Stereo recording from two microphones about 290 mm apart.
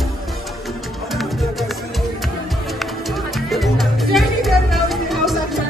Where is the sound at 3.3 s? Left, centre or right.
Centre.